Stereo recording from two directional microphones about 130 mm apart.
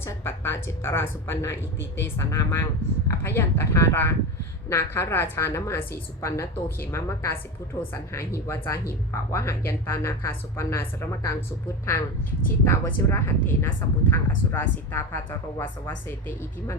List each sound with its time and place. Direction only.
0.0 s a woman's voice: 20° left (ahead or behind)
12.6 s speech: 20° left (ahead or behind)